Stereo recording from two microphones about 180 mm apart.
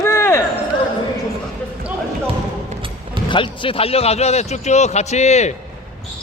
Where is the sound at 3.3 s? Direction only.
30° left (ahead or behind).